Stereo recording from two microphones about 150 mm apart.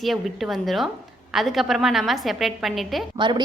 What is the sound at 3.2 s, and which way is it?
Speech, 30° right (ahead or behind).